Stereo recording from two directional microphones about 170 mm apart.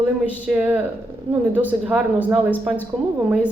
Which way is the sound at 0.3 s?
10° right (ahead or behind).